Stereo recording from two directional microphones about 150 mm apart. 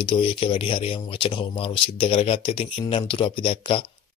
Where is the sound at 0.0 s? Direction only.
35° left (ahead or behind).